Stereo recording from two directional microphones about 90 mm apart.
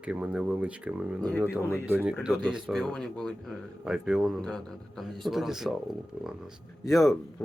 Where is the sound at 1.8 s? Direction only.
25° right (ahead or behind).